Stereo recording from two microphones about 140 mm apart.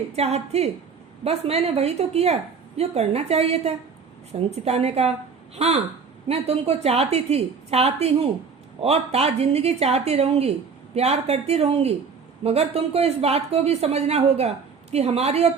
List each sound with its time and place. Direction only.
0.2 s speech: 50° right (ahead or behind)